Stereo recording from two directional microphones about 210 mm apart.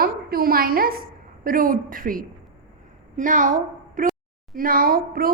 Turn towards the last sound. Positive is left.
turn(degrees=-45)  # may be behind; listen again after turning